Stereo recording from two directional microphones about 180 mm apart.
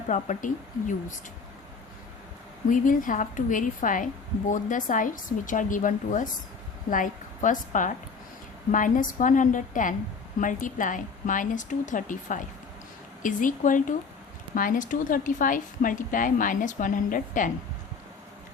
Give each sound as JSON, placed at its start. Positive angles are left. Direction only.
{"t": 0.1, "sound": "a woman's voice", "side_deg": 45}
{"t": 2.6, "sound": "a woman's voice", "side_deg": 45}